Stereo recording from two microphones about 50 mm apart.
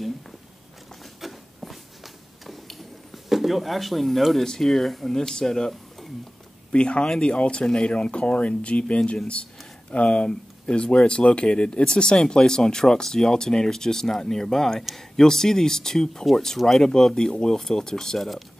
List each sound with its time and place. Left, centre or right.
1.2 s a sound: centre
2.4 s tick-tock: centre
3.3 s speech: centre
6.7 s speech: left; by 18.4 s centre